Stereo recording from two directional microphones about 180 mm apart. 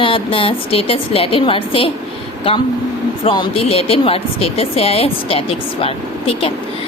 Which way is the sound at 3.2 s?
30° left (ahead or behind).